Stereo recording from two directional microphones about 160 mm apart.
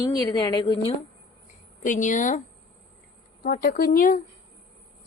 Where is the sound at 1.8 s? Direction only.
50° left (ahead or behind).